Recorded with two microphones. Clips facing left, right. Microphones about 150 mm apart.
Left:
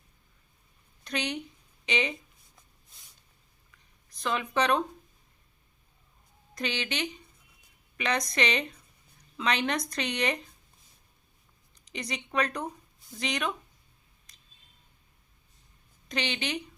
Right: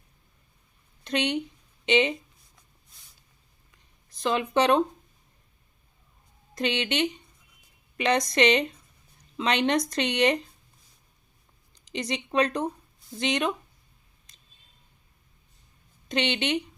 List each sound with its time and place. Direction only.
1.0 s a woman's voice: 30° right (ahead or behind)
4.2 s speech: 30° right (ahead or behind)
6.5 s a woman's voice: 30° right (ahead or behind)
11.7 s a woman's voice: 30° right (ahead or behind)
16.0 s speech: 30° right (ahead or behind)